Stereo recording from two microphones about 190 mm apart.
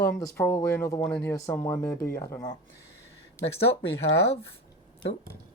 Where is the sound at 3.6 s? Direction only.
30° left (ahead or behind).